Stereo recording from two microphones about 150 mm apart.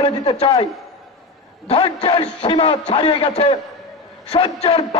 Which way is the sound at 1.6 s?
40° left (ahead or behind).